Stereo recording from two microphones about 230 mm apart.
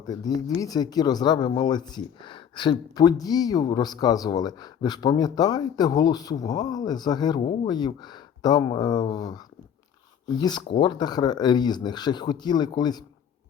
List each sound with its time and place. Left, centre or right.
0.0 s speech: centre